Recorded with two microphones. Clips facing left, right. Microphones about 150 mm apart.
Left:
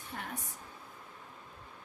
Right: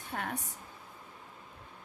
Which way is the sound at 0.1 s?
70° right (ahead or behind).